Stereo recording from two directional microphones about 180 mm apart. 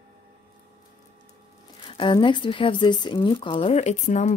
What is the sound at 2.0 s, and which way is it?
A woman's voice, 25° left (ahead or behind).